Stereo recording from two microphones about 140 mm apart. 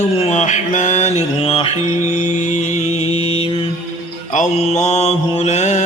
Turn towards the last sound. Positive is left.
turn(degrees=55)  # may be behind; listen again after turning